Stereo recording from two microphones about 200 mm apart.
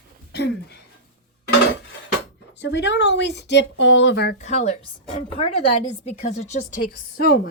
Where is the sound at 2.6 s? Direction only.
60° left (ahead or behind).